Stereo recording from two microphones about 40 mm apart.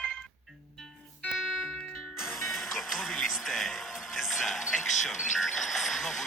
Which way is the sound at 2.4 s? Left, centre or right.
Centre.